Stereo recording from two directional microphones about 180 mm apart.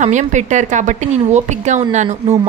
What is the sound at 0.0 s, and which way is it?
Speech, 40° right (ahead or behind).